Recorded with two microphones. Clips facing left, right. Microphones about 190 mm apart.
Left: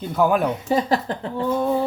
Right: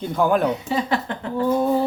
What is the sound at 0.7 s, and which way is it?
Speech, 40° left (ahead or behind).